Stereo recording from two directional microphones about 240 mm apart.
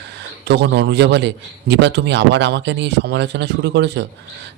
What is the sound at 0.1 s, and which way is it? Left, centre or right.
A man's voice, right.